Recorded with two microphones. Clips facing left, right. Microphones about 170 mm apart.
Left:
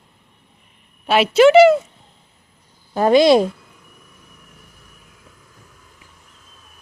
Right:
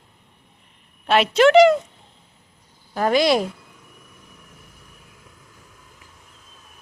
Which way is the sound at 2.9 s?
25° left (ahead or behind).